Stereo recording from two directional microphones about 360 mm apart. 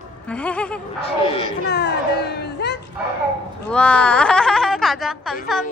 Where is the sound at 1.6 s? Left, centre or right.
Left.